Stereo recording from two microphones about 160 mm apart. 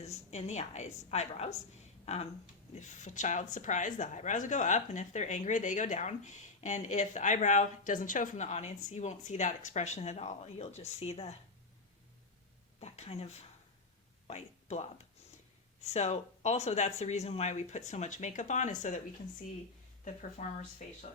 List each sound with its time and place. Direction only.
0.0 s a woman's voice: 45° left (ahead or behind)
12.8 s a woman's voice: 40° left (ahead or behind)
20.4 s a woman's voice: 50° left (ahead or behind)